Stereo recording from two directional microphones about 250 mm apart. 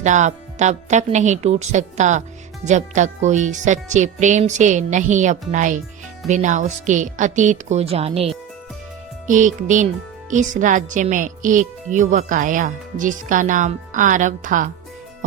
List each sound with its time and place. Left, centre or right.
0.0 s speech: right